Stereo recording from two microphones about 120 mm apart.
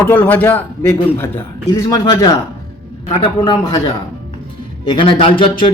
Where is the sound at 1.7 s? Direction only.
35° left (ahead or behind).